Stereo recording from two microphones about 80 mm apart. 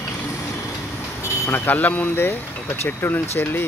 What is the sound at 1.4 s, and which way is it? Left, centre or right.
Speech, left.